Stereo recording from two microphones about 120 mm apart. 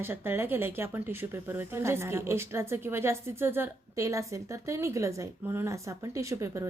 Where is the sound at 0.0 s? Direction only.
20° right (ahead or behind).